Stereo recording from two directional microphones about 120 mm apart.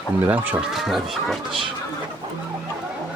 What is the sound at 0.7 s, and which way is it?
Speech, centre (ahead or behind).